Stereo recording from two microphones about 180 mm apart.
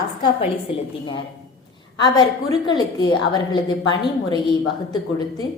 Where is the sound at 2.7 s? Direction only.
25° left (ahead or behind).